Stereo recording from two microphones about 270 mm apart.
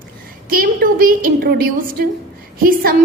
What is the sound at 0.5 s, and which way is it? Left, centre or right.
A woman's voice, right.